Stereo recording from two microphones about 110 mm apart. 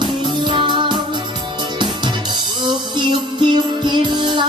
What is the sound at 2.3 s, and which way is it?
Music, 45° right (ahead or behind).